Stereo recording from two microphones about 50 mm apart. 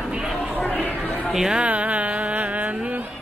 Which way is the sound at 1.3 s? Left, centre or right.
Centre.